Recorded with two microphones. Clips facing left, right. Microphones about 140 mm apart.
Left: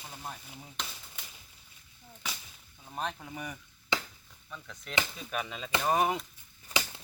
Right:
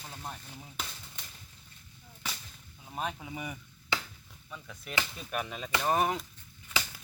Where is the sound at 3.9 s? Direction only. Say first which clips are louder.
Left 2 dB; 20° left (ahead or behind).